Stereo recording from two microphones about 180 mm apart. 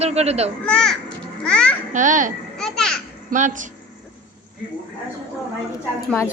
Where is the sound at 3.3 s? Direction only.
45° right (ahead or behind).